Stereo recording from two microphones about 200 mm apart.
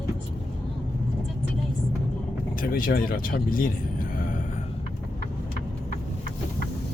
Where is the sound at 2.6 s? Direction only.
45° left (ahead or behind).